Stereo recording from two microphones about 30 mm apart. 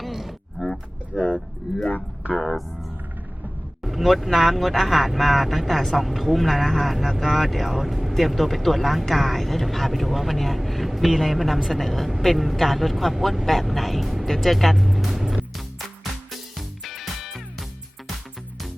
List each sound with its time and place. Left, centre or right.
0.1 s grunt: centre
0.6 s a sound: centre
2.3 s speech: centre
3.8 s speech: centre
16.3 s music: centre